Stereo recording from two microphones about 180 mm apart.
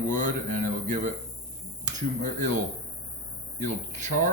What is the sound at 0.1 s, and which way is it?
Speech, 45° right (ahead or behind).